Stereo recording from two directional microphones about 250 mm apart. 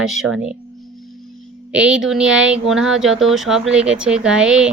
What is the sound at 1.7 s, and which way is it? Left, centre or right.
Speech, centre.